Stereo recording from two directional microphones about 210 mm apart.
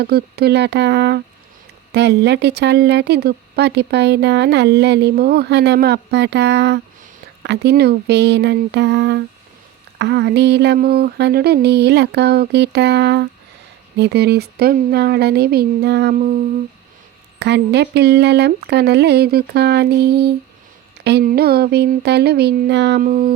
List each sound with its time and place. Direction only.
0.0 s speech: 50° right (ahead or behind)
17.4 s speech: 55° right (ahead or behind)